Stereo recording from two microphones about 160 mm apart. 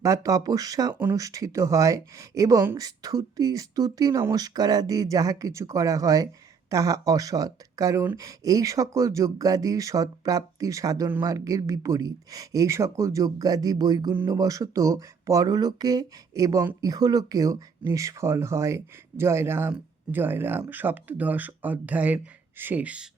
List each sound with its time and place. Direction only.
0.0 s speech: 20° right (ahead or behind)